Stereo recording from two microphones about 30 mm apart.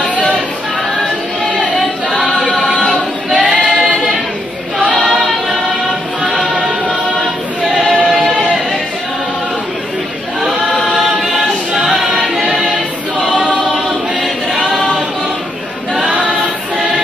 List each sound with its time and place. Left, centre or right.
2.5 s choir: centre
3.3 s choir: right
6.5 s music: right
12.2 s music: centre
14.7 s choir: centre